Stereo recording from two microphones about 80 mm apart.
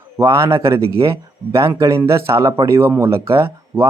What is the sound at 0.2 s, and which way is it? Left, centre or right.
Speech, right.